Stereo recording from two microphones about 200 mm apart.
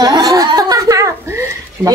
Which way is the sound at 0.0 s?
20° right (ahead or behind).